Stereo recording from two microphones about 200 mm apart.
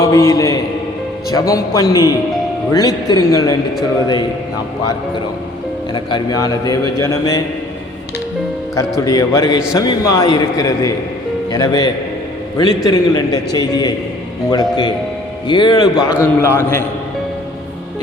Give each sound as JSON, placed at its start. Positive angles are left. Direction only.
{"t": 0.0, "sound": "a man's voice", "side_deg": 15}
{"t": 5.9, "sound": "a man's voice", "side_deg": 25}
{"t": 8.7, "sound": "a man's voice", "side_deg": 15}